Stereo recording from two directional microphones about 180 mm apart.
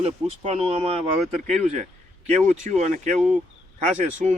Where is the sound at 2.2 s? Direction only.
40° right (ahead or behind).